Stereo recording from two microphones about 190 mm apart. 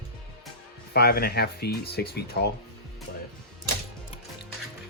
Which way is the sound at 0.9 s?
55° left (ahead or behind).